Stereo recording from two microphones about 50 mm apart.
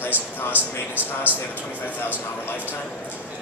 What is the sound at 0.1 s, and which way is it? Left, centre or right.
A man's voice, right.